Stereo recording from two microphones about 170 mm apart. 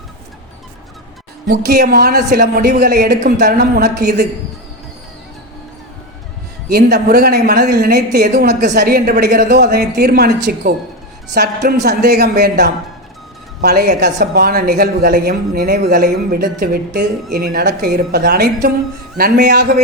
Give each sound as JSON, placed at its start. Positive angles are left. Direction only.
{"t": 1.5, "sound": "a woman's voice", "side_deg": -65}
{"t": 6.7, "sound": "a woman's voice", "side_deg": -65}